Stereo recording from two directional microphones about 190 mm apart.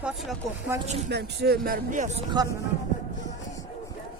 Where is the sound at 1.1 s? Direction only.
60° right (ahead or behind).